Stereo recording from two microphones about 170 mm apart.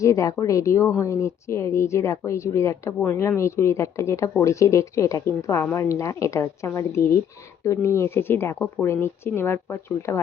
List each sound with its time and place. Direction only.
0.0 s a woman's voice: 20° left (ahead or behind)